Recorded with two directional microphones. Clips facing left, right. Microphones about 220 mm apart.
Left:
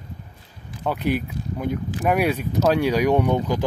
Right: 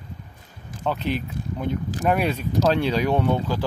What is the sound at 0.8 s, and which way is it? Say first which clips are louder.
Speech: left 2 dB; 10° left (ahead or behind).